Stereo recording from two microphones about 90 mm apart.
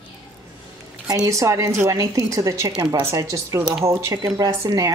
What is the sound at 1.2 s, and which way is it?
Speech, 35° right (ahead or behind).